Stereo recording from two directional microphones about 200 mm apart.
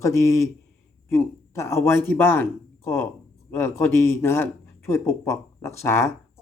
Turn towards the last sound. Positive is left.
turn(degrees=15)  # may be behind; listen again after turning